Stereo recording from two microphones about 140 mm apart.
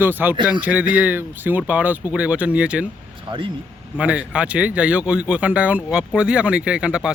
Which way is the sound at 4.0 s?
10° right (ahead or behind).